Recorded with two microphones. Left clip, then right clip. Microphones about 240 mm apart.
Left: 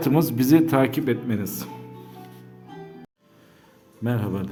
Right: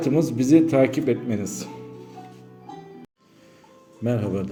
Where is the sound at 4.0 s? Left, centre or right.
Centre.